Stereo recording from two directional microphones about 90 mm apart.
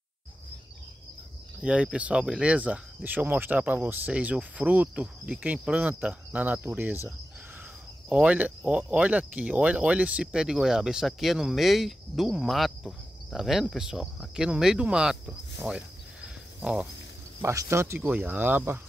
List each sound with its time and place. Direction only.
1.6 s speech: 10° right (ahead or behind)
8.1 s speech: 15° right (ahead or behind)
17.4 s speech: 30° right (ahead or behind)
18.0 s speech: 20° right (ahead or behind)